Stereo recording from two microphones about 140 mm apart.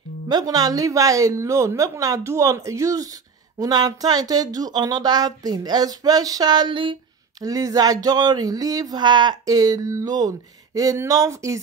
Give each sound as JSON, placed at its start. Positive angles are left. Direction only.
{"t": 0.3, "sound": "speech", "side_deg": -25}
{"t": 7.4, "sound": "speech", "side_deg": -25}